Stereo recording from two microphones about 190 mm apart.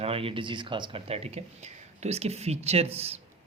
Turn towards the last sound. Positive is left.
turn(degrees=-30)  # may be behind; listen again after turning